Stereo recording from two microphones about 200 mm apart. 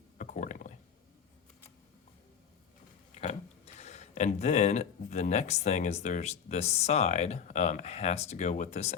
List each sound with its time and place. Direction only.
0.2 s rowboat: 40° left (ahead or behind)
3.8 s speech: 35° left (ahead or behind)